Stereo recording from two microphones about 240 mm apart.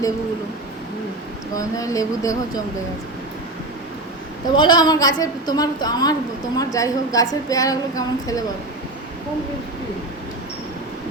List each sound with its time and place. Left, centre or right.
1.5 s a woman's voice: centre
4.5 s a woman's voice: centre